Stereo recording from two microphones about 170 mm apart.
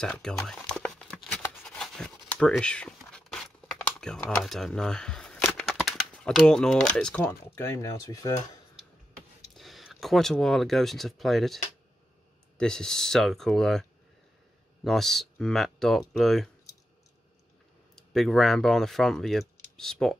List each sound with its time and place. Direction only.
0.0 s a sound: 5° left (ahead or behind)
4.0 s speech: 5° left (ahead or behind)
7.2 s speech: 15° left (ahead or behind)
9.5 s speech: centre (ahead or behind)
17.9 s speech: centre (ahead or behind)